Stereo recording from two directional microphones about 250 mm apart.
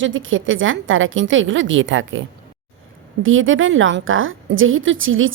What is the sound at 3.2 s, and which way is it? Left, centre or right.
Speech, right.